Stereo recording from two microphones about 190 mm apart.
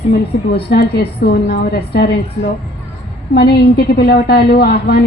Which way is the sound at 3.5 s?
60° left (ahead or behind).